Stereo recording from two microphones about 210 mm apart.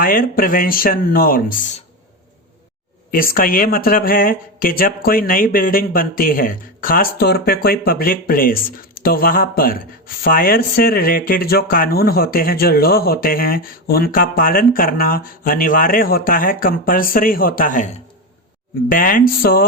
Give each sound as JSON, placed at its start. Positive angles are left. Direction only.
{"t": 0.0, "sound": "speech", "side_deg": 40}
{"t": 3.1, "sound": "speech", "side_deg": 45}
{"t": 18.9, "sound": "speech", "side_deg": 40}